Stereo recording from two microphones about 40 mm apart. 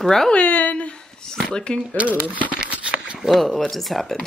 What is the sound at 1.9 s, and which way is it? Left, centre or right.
Speech, right.